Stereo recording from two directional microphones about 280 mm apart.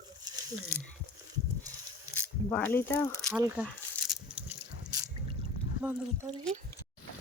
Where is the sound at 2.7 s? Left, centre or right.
Centre.